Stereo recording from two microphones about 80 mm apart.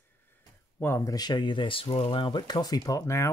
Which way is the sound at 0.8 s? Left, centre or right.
Left.